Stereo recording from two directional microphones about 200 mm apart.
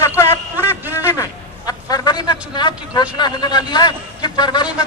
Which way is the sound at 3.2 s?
20° left (ahead or behind).